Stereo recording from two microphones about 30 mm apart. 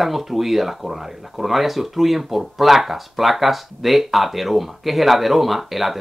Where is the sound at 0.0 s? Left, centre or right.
Centre.